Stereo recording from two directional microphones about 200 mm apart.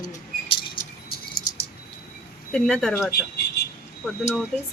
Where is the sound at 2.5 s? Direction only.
5° left (ahead or behind).